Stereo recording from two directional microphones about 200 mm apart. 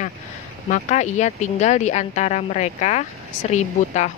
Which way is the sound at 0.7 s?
35° left (ahead or behind).